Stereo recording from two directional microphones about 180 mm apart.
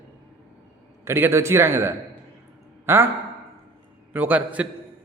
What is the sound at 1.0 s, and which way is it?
A man's voice, 15° right (ahead or behind).